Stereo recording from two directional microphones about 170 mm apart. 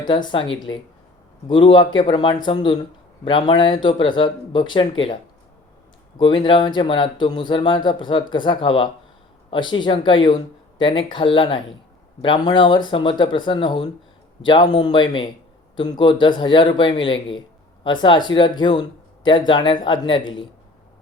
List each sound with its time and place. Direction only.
0.1 s speech: 30° left (ahead or behind)
6.1 s speech: 30° left (ahead or behind)